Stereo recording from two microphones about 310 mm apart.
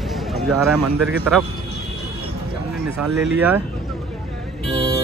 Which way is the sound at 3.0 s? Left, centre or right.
Centre.